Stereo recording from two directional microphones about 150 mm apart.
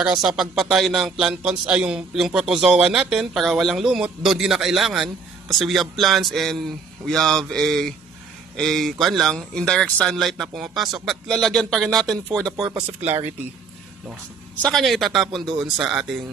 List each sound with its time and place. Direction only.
0.0 s speech: 5° right (ahead or behind)
14.6 s speech: centre (ahead or behind)